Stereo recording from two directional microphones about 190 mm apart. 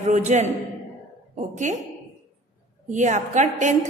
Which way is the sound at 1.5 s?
40° right (ahead or behind).